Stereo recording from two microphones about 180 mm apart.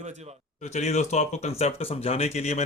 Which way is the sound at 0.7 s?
40° left (ahead or behind).